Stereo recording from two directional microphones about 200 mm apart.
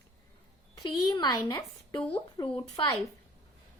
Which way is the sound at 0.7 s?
20° left (ahead or behind).